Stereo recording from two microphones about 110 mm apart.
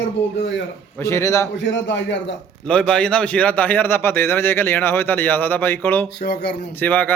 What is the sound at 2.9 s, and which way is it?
A man's voice, 10° left (ahead or behind).